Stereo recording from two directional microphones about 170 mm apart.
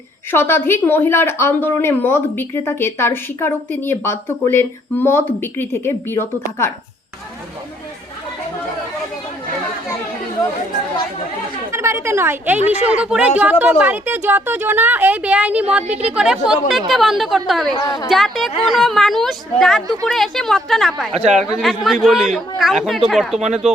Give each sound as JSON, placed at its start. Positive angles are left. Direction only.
{"t": 0.3, "sound": "speech", "side_deg": 15}
{"t": 11.7, "sound": "a woman's voice", "side_deg": -15}
{"t": 17.7, "sound": "a woman's voice", "side_deg": 25}
{"t": 18.1, "sound": "a woman's voice", "side_deg": 0}
{"t": 23.4, "sound": "speech", "side_deg": -40}